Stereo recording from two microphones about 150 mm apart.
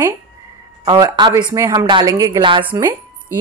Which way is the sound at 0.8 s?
30° right (ahead or behind).